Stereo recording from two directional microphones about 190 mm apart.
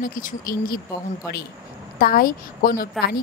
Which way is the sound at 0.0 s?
50° left (ahead or behind).